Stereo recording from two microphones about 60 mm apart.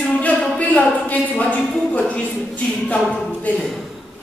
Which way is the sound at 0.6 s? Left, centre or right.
Left.